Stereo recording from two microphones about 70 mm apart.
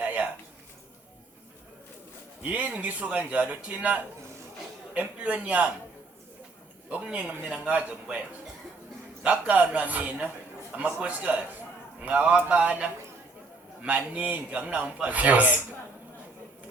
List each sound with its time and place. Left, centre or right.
0.0 s a sound: right
2.4 s a man's voice: right
6.9 s a man's voice: centre
9.2 s a man's voice: centre